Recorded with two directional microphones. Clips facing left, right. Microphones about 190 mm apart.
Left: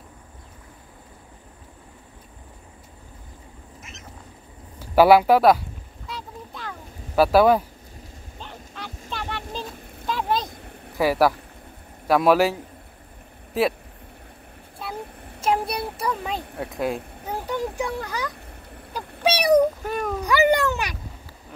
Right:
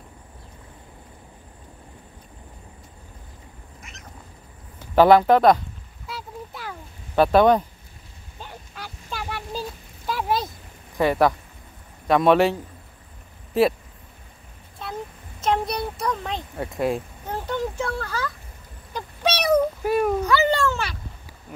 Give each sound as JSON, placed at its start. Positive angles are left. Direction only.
{"t": 4.7, "sound": "speech", "side_deg": 10}
{"t": 6.0, "sound": "a sound", "side_deg": -5}
{"t": 7.2, "sound": "a man's voice", "side_deg": 5}
{"t": 8.4, "sound": "honk", "side_deg": -5}
{"t": 11.0, "sound": "a man's voice", "side_deg": 5}
{"t": 13.5, "sound": "vehicle", "side_deg": 0}
{"t": 15.4, "sound": "a sound", "side_deg": 10}
{"t": 19.8, "sound": "a sound", "side_deg": -10}
{"t": 20.2, "sound": "cat", "side_deg": 15}